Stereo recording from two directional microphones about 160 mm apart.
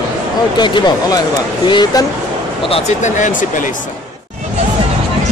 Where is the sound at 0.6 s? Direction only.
25° left (ahead or behind).